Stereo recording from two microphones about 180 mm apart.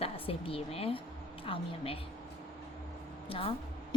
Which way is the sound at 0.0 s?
30° left (ahead or behind).